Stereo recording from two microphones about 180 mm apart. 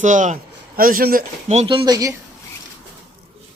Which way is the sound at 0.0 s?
45° right (ahead or behind).